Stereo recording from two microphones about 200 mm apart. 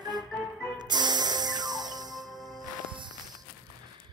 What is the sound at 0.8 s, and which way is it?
Music, 20° right (ahead or behind).